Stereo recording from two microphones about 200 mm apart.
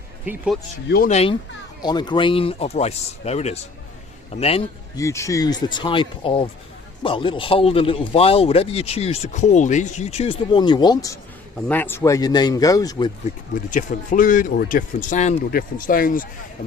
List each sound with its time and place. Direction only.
0.3 s speech: 5° right (ahead or behind)
0.9 s speech: 50° left (ahead or behind)
1.1 s a man's voice: 30° left (ahead or behind)
4.9 s a man's voice: 15° left (ahead or behind)
13.5 s speech: 40° left (ahead or behind)